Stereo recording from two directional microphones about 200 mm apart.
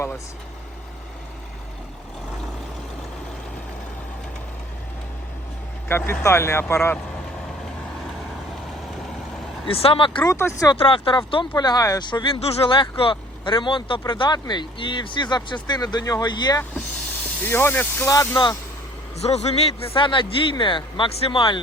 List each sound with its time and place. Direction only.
5.9 s speech: 10° left (ahead or behind)
9.6 s speech: 30° left (ahead or behind)
10.8 s speech: 25° left (ahead or behind)
19.2 s speech: 30° left (ahead or behind)